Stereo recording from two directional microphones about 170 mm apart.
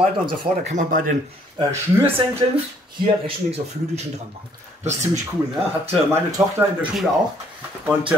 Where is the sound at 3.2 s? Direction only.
35° right (ahead or behind).